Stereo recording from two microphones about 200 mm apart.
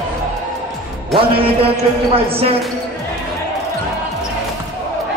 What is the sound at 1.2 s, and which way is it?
A man's voice, 30° right (ahead or behind).